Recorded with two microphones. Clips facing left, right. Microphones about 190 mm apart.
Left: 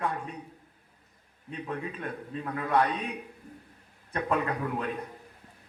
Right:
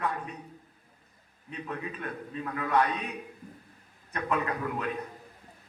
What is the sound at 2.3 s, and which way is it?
Speech, 30° left (ahead or behind).